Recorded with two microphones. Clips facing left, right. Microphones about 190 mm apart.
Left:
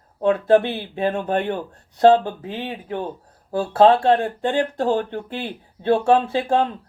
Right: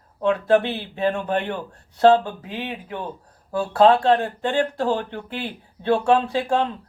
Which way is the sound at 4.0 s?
45° left (ahead or behind).